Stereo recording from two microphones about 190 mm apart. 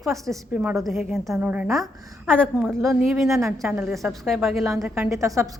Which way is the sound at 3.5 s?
10° right (ahead or behind).